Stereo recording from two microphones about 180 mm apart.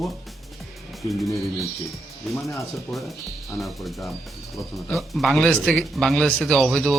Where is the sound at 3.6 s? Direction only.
Centre (ahead or behind).